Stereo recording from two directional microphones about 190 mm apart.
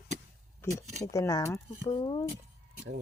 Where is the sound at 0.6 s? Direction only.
15° left (ahead or behind).